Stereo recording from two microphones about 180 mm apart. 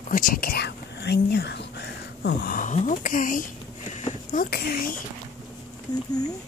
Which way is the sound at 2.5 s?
45° left (ahead or behind).